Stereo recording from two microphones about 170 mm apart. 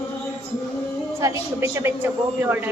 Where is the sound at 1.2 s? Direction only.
15° right (ahead or behind).